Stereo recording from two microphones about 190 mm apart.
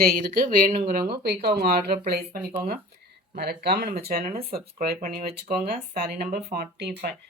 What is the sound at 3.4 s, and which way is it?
Speech, 60° right (ahead or behind).